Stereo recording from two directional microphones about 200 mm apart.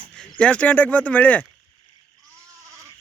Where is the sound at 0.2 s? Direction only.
5° left (ahead or behind).